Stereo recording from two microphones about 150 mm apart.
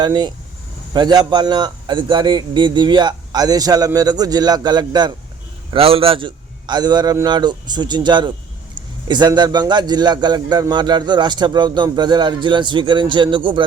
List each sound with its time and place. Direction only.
0.0 s a man's voice: 30° right (ahead or behind)
5.7 s a man's voice: 40° right (ahead or behind)